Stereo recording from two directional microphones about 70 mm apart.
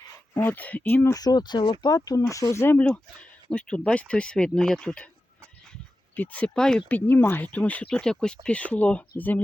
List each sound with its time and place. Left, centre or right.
0.3 s speech: left
1.1 s speech: left
2.0 s speech: left
2.5 s speech: left
2.9 s speech: centre
6.1 s speech: left
6.5 s speech: centre
6.8 s speech: left
8.0 s speech: centre